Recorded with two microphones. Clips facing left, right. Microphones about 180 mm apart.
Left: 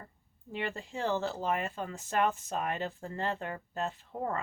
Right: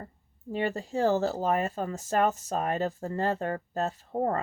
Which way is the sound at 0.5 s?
40° right (ahead or behind).